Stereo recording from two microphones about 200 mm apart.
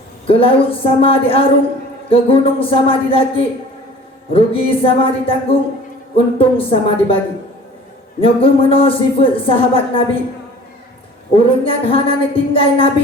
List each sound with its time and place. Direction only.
0.3 s speech: 25° left (ahead or behind)
8.2 s speech: 25° left (ahead or behind)
11.3 s speech: 25° left (ahead or behind)